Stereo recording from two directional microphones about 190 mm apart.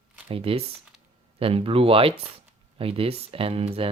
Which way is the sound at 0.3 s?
30° right (ahead or behind).